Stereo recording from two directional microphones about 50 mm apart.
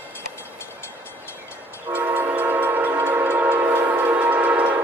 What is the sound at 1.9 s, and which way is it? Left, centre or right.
Train, right.